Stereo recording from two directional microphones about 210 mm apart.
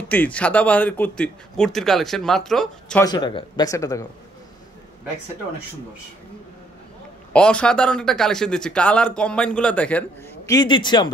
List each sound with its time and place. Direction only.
0.1 s speech: 5° left (ahead or behind)
3.0 s speech: 20° left (ahead or behind)
7.3 s speech: 5° left (ahead or behind); by 11.1 s 20° left (ahead or behind)